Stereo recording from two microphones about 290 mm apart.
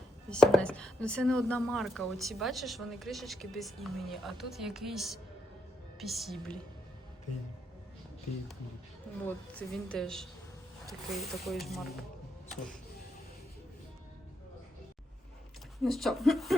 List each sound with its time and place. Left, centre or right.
0.3 s speech: centre
9.2 s speech: centre
15.8 s speech: centre